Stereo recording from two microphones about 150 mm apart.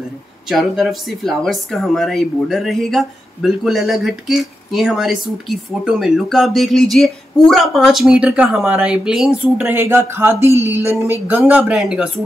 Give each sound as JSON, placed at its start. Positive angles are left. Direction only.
{"t": 0.5, "sound": "speech", "side_deg": 0}
{"t": 9.6, "sound": "speech", "side_deg": -15}